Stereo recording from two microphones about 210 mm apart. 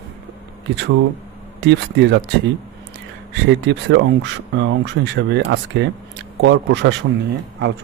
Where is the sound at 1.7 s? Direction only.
55° right (ahead or behind).